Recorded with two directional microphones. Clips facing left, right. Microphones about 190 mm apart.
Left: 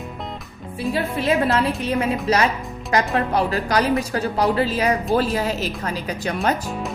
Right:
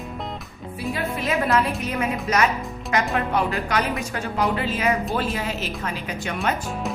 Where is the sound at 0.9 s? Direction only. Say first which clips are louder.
Left 4 dB; 30° left (ahead or behind).